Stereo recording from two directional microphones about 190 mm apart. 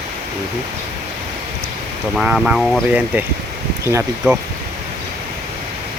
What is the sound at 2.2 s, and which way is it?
Speech, 5° right (ahead or behind).